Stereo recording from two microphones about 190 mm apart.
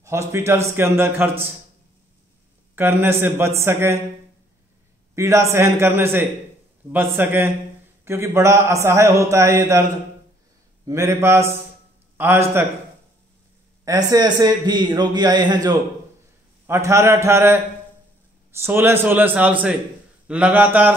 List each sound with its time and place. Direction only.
0.3 s a man's voice: 15° right (ahead or behind)
2.7 s a man's voice: 10° right (ahead or behind)
5.1 s a man's voice: 15° right (ahead or behind)
10.9 s a man's voice: 15° right (ahead or behind)
13.8 s a man's voice: 20° right (ahead or behind)